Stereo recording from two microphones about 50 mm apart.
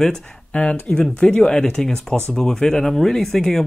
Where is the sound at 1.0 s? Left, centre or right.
Centre.